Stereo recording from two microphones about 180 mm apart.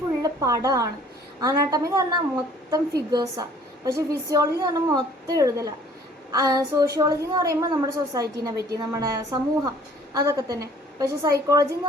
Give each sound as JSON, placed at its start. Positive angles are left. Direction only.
{"t": 0.2, "sound": "a woman's voice", "side_deg": -20}